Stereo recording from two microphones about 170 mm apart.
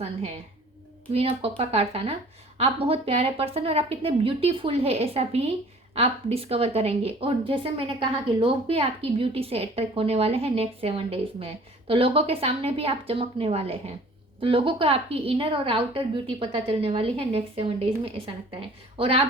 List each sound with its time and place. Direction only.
1.1 s a woman's voice: 35° right (ahead or behind)
18.9 s a woman's voice: 35° right (ahead or behind)